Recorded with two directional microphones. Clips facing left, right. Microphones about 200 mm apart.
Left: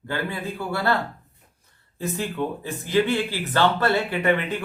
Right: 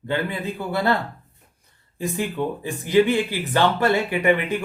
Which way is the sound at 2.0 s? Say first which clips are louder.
Right 2 dB; 15° right (ahead or behind).